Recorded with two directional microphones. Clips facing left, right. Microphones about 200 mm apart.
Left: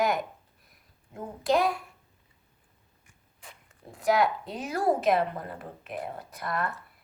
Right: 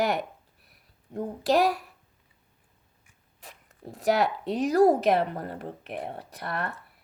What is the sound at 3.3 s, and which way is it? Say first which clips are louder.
Zipper: right 2 dB; 40° right (ahead or behind).